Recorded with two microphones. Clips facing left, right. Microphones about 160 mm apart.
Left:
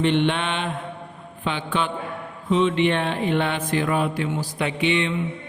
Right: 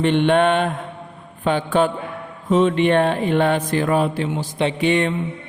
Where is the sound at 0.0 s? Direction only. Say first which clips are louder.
Right 5 dB; 45° right (ahead or behind).